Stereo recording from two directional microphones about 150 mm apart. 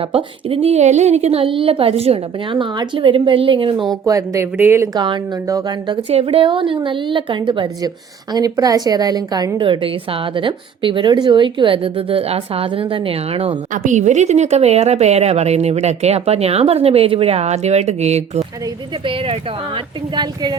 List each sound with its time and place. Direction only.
0.1 s a woman's voice: 40° right (ahead or behind)
4.0 s speech: 25° right (ahead or behind)
4.9 s speech: 30° right (ahead or behind)
6.1 s a woman's voice: 40° right (ahead or behind)
13.8 s speech: 50° right (ahead or behind)
20.1 s speech: 30° right (ahead or behind)